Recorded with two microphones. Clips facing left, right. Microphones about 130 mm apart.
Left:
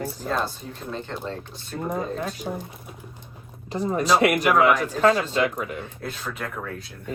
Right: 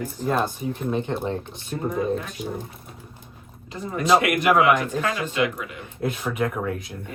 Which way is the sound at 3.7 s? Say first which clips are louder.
Right 1 dB; 35° left (ahead or behind).